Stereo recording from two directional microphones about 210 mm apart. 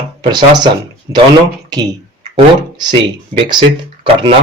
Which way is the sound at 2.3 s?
20° right (ahead or behind).